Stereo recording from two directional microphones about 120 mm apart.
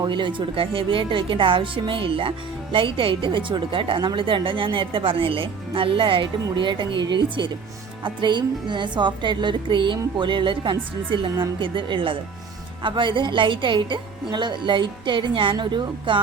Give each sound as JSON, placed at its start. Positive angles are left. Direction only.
{"t": 0.0, "sound": "speech", "side_deg": -40}